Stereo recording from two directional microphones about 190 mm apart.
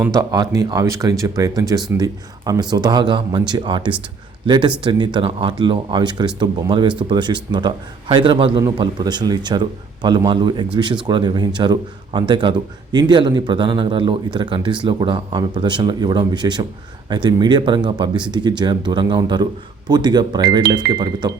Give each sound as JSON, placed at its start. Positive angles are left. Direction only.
{"t": 0.0, "sound": "a man's voice", "side_deg": -15}